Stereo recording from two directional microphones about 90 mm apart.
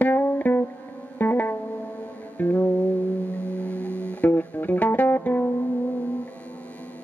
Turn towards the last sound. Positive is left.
turn(degrees=20)  # may be behind; listen again after turning